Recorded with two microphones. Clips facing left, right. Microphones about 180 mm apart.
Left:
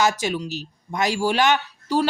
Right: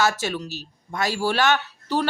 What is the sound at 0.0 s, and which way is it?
A woman's voice, 15° left (ahead or behind).